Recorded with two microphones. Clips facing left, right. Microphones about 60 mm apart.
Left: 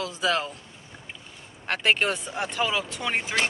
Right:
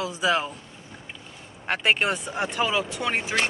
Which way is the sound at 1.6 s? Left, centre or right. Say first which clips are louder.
Right 1 dB; centre.